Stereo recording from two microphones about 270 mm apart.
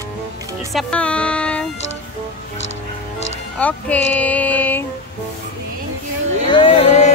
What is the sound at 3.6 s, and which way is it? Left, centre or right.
Speech, centre.